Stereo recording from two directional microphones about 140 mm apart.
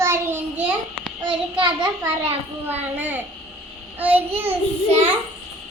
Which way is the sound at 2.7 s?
15° right (ahead or behind).